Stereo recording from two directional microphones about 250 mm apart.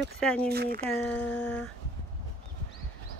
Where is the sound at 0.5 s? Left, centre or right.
Right.